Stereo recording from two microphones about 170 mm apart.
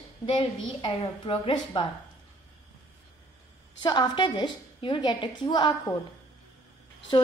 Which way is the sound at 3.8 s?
25° left (ahead or behind).